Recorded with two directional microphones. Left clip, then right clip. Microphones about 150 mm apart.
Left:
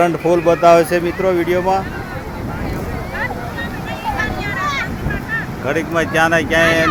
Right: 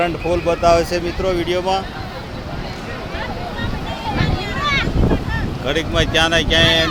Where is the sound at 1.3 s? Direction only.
45° left (ahead or behind).